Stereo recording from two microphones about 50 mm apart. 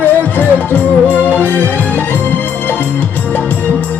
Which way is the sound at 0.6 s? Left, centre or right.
Left.